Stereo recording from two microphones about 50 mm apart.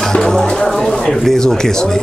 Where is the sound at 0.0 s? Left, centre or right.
Centre.